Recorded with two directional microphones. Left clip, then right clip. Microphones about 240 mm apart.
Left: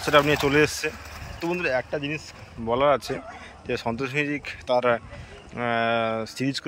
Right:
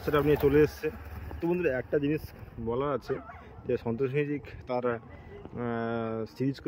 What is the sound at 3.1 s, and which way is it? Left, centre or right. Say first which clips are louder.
Speech: left 3 dB; left.